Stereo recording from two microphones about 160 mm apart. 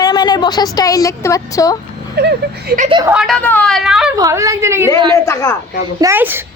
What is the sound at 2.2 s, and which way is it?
Speech, 90° right.